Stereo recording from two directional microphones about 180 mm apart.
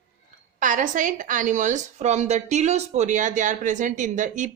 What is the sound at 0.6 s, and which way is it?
A woman's voice, 45° right (ahead or behind).